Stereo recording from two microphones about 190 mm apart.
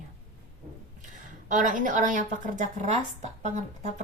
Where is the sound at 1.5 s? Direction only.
45° right (ahead or behind).